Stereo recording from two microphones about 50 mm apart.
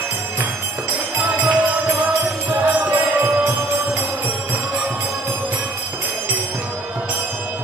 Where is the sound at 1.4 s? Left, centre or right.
Right.